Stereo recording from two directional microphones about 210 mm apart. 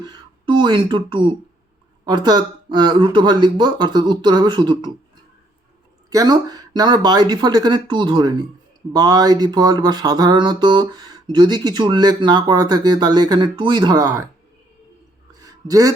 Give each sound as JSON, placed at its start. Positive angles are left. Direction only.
{"t": 0.0, "sound": "speech", "side_deg": -20}
{"t": 6.1, "sound": "speech", "side_deg": -20}
{"t": 15.4, "sound": "a sound", "side_deg": -15}